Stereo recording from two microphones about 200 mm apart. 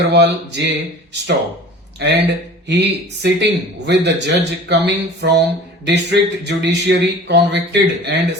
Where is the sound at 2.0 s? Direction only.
55° right (ahead or behind).